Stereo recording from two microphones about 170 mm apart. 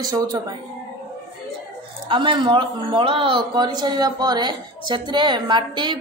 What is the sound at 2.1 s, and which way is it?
Speech, 30° right (ahead or behind).